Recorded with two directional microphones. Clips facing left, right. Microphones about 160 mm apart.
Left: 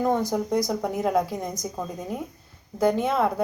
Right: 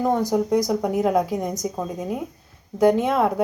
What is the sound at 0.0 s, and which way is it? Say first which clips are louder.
Speech: right 3 dB; 15° right (ahead or behind).